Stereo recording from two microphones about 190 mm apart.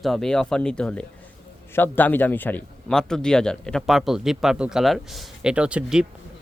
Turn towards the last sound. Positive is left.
turn(degrees=-5)  # may be behind; listen again after turning